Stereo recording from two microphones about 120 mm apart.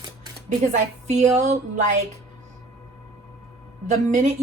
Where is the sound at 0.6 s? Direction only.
90° right.